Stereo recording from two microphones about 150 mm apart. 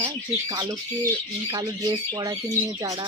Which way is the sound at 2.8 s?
30° right (ahead or behind).